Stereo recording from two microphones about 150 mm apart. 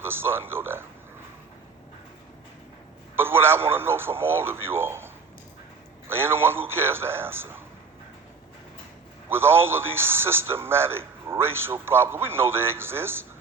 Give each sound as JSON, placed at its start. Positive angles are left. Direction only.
{"t": 0.0, "sound": "a man's voice", "side_deg": -15}
{"t": 3.2, "sound": "a man's voice", "side_deg": -15}
{"t": 9.3, "sound": "a man's voice", "side_deg": -15}